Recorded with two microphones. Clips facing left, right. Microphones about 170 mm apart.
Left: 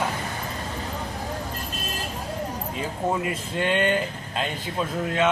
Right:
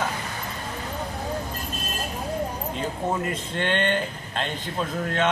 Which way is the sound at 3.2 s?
5° left (ahead or behind).